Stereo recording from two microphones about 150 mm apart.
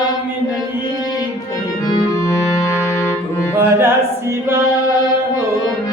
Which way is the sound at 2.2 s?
20° left (ahead or behind).